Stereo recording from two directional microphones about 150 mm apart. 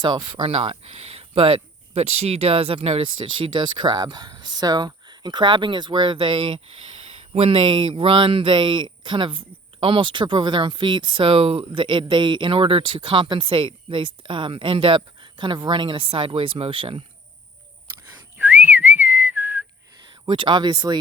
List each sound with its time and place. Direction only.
0.0 s speech: 30° right (ahead or behind)
18.3 s whistling: 10° right (ahead or behind)
20.2 s speech: 30° right (ahead or behind)